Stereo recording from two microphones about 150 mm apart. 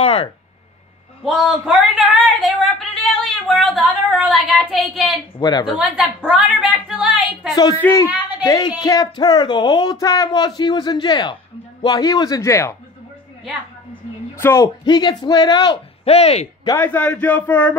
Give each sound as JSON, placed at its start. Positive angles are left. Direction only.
{"t": 0.0, "sound": "speech", "side_deg": 35}
{"t": 1.2, "sound": "a sound", "side_deg": 0}
{"t": 5.4, "sound": "speech", "side_deg": 25}
{"t": 5.8, "sound": "a woman's voice", "side_deg": -10}
{"t": 7.8, "sound": "speech", "side_deg": 20}
{"t": 14.3, "sound": "speech", "side_deg": 15}
{"t": 16.0, "sound": "speech", "side_deg": 45}
{"t": 16.7, "sound": "a man's voice", "side_deg": 10}